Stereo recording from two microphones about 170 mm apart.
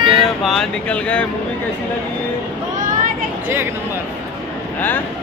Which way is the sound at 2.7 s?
50° right (ahead or behind).